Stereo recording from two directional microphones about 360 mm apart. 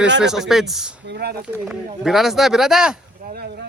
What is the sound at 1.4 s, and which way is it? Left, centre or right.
Speech, centre.